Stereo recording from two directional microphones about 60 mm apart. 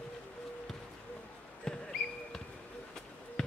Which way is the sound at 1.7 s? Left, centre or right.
Centre.